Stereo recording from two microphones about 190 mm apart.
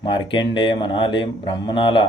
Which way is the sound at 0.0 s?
25° left (ahead or behind).